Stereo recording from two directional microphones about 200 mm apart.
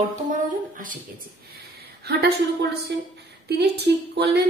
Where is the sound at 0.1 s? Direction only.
40° right (ahead or behind).